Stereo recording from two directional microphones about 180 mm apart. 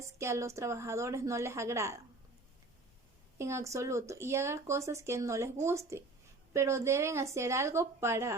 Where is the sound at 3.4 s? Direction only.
15° right (ahead or behind).